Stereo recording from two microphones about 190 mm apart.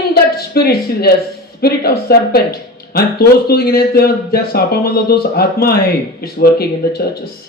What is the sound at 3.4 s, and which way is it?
Speech, 55° left (ahead or behind).